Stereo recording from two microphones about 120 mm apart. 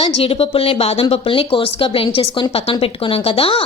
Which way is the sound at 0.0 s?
50° left (ahead or behind).